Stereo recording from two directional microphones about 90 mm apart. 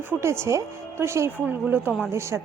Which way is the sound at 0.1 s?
30° right (ahead or behind).